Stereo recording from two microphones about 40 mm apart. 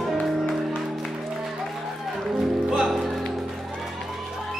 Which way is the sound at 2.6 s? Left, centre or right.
Centre.